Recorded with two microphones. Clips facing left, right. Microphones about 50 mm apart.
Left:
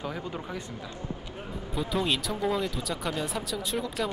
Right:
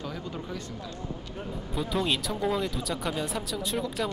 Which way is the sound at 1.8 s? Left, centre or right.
Centre.